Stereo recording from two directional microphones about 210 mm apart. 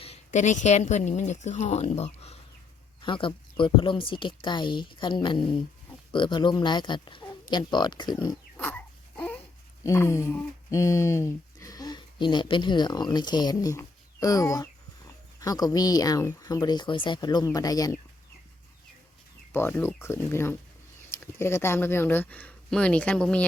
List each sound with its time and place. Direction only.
0.0 s a woman's voice: 30° left (ahead or behind)
8.5 s dog: 10° left (ahead or behind)
9.8 s speech: 15° left (ahead or behind)
19.5 s speech: 10° left (ahead or behind)